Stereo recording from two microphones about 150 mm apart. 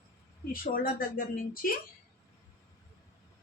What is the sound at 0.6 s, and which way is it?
Speech, 75° left (ahead or behind).